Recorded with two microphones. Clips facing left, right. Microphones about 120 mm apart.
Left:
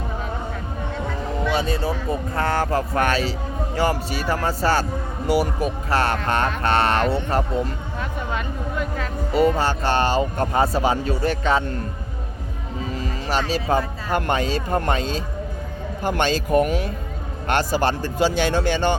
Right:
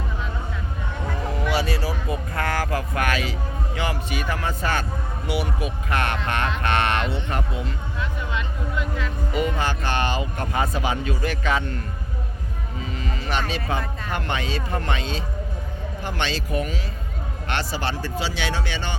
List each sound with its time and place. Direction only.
1.5 s a sound: 25° left (ahead or behind)
3.8 s a man's voice: 35° left (ahead or behind)
12.9 s music: 35° left (ahead or behind)
13.5 s speech: 40° left (ahead or behind)